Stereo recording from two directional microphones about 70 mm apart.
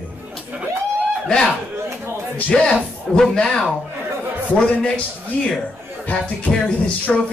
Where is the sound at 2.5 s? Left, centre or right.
Centre.